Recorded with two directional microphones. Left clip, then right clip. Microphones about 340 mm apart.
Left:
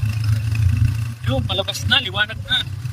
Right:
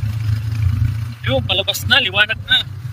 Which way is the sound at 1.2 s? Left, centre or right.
Right.